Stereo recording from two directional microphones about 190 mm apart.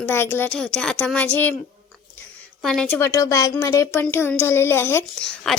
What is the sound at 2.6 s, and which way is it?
A woman's voice, centre (ahead or behind).